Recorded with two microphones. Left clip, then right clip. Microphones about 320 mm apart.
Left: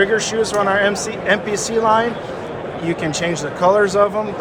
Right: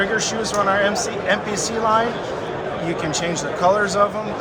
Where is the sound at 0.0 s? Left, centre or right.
Left.